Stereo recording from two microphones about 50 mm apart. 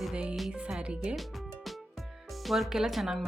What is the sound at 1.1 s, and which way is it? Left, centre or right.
Music, centre.